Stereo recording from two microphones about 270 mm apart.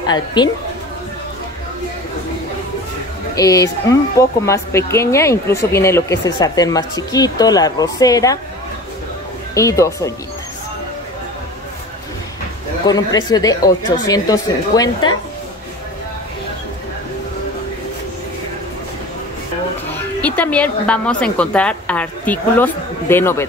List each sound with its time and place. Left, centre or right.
0.0 s speech: centre
3.3 s speech: centre
9.5 s speech: centre
12.8 s speech: centre
20.2 s a woman's voice: centre